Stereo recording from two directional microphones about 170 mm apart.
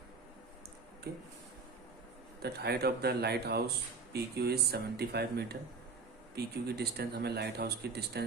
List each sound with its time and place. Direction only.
1.1 s speech: 70° right (ahead or behind)
2.4 s speech: 70° right (ahead or behind)